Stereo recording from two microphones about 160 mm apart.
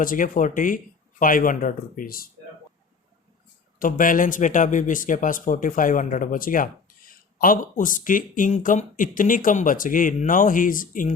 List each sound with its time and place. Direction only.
0.0 s speech: 55° left (ahead or behind)
3.8 s speech: 60° left (ahead or behind)